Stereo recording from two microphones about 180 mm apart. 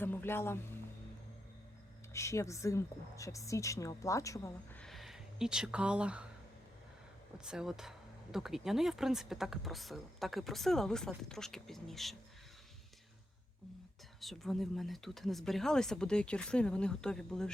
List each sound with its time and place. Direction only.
0.0 s music: 10° left (ahead or behind)
2.1 s a woman's voice: 15° left (ahead or behind)
4.8 s speech: centre (ahead or behind)
7.3 s speech: 5° right (ahead or behind)
14.2 s speech: centre (ahead or behind)